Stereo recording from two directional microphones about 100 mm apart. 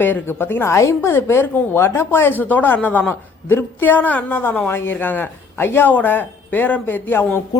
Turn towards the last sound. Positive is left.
turn(degrees=20)  # may be behind; listen again after turning